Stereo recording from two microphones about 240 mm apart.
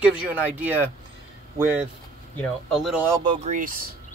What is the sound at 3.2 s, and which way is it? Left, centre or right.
Speech, right.